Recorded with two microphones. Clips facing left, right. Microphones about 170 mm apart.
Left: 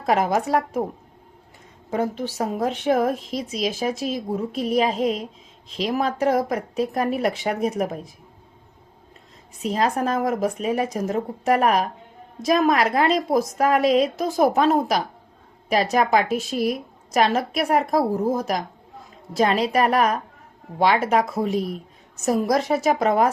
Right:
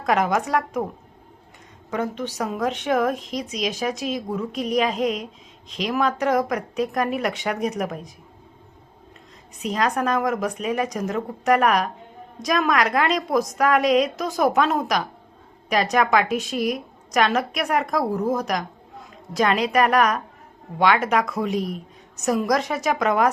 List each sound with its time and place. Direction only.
0.1 s a woman's voice: 35° left (ahead or behind)
1.9 s a woman's voice: 40° left (ahead or behind)
3.2 s speech: centre (ahead or behind)
3.8 s a woman's voice: 30° left (ahead or behind)
9.6 s a woman's voice: 30° left (ahead or behind)
21.5 s speech: centre (ahead or behind)
22.1 s a woman's voice: 30° left (ahead or behind)